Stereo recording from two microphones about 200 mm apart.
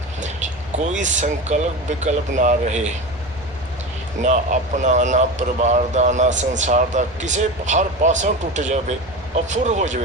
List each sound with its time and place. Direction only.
0.2 s speech: 35° right (ahead or behind)
4.8 s a man's voice: 35° right (ahead or behind)